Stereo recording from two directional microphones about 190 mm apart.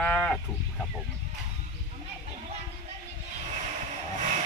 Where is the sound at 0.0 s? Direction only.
10° left (ahead or behind).